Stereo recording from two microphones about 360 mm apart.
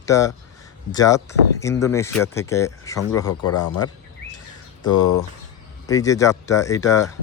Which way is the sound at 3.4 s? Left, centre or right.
Left.